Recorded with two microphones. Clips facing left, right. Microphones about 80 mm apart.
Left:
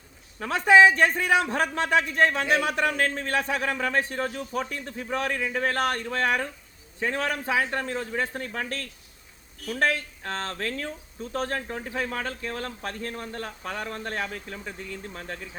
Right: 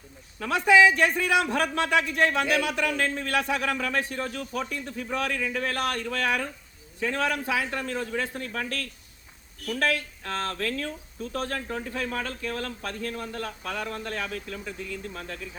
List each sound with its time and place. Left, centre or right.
0.3 s a man's voice: left